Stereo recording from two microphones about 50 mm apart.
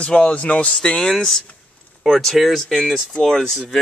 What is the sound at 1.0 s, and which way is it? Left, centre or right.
Speech, centre.